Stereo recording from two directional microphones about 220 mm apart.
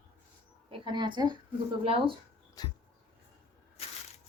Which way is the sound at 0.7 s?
20° right (ahead or behind).